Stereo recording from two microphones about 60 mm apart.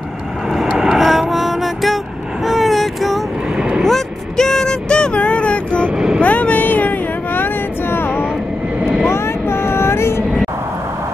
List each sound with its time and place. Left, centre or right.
0.5 s vehicle: centre
3.5 s vehicle: centre
3.8 s a sound: centre
5.9 s vehicle: centre
6.2 s vehicle: left
7.9 s vehicle: left
9.1 s a sound: left